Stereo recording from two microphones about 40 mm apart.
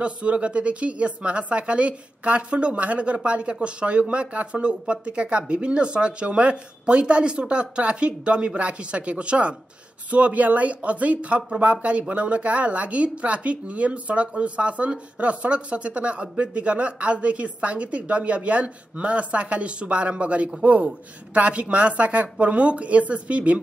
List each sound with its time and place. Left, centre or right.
0.0 s speech: right
10.1 s speech: right